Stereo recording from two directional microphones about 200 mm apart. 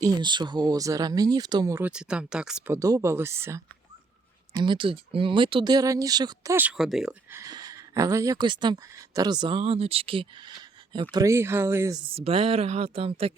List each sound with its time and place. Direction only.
0.0 s speech: 20° right (ahead or behind)
1.9 s speech: 5° right (ahead or behind)
2.7 s speech: 15° right (ahead or behind)
4.5 s speech: 25° right (ahead or behind)
12.0 s speech: 30° right (ahead or behind)